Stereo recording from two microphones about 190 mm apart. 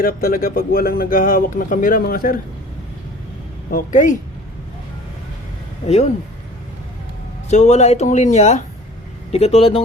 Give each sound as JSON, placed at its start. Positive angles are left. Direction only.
{"t": 0.0, "sound": "speech", "side_deg": 50}
{"t": 3.7, "sound": "speech", "side_deg": 45}
{"t": 7.5, "sound": "speech", "side_deg": 35}